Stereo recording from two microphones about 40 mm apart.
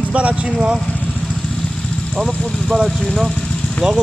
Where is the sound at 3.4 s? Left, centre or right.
Left.